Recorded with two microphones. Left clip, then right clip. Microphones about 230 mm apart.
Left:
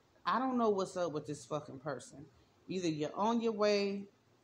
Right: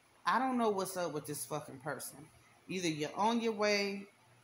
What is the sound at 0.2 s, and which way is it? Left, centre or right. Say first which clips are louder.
Speech: right 1 dB; right.